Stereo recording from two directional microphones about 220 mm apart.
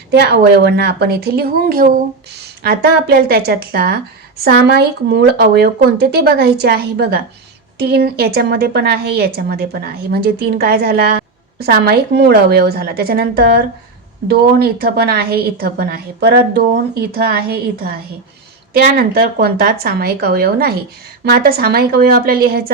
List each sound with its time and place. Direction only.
0.1 s speech: 50° right (ahead or behind)